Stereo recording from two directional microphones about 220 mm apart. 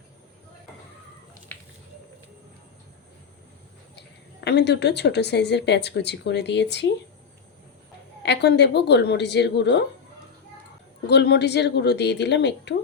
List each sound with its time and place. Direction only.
3.9 s a woman's voice: 50° left (ahead or behind)
8.2 s a woman's voice: 50° left (ahead or behind)
11.1 s a woman's voice: 50° left (ahead or behind)